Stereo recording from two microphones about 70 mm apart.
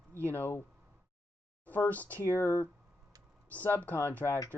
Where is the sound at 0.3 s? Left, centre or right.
Left.